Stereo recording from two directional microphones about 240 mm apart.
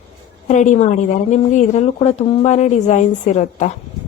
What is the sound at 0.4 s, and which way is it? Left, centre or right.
A woman's voice, left.